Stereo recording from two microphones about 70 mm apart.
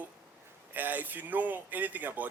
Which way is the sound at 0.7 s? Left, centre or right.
Right.